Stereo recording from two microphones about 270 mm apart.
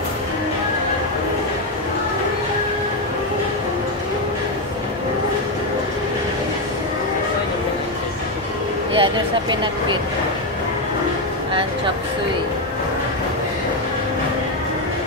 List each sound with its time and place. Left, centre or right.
8.9 s speech: centre